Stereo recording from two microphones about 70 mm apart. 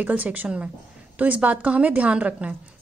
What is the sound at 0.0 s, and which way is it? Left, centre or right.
A woman's voice, right.